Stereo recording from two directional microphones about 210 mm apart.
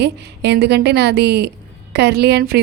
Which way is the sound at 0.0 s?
55° right (ahead or behind).